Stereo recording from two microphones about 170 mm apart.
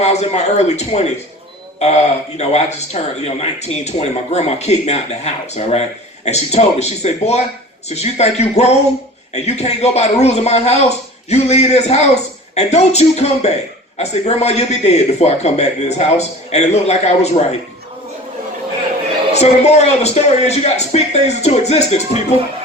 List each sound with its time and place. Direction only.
0.0 s speech: 40° left (ahead or behind)
19.3 s speech: 40° left (ahead or behind)